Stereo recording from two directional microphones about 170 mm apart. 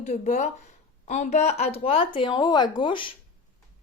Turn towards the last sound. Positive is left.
turn(degrees=30)  # may be behind; listen again after turning